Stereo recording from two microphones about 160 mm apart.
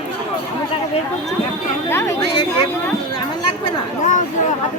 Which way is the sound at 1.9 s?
15° left (ahead or behind).